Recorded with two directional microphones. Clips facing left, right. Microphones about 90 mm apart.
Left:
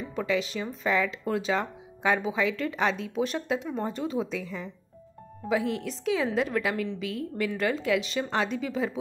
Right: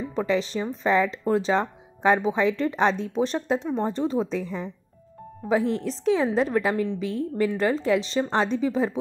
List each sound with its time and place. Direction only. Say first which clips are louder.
0.1 s speech: right 3 dB; 30° right (ahead or behind)